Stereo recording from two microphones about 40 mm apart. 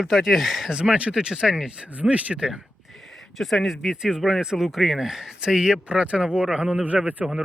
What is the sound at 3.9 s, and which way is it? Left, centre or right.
Speech, centre.